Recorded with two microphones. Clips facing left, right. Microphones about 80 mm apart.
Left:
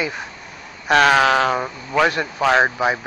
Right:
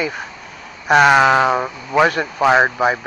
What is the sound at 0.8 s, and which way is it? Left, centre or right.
Speech, centre.